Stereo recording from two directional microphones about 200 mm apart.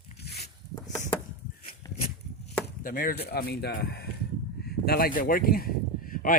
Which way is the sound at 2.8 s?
45° left (ahead or behind).